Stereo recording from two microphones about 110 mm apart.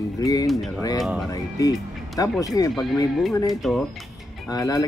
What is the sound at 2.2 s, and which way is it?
Speech, 35° left (ahead or behind).